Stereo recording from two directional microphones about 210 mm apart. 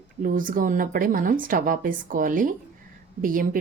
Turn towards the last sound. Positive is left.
turn(degrees=-40)  # may be behind; listen again after turning